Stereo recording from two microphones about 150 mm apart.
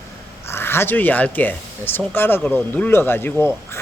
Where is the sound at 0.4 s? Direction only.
15° left (ahead or behind).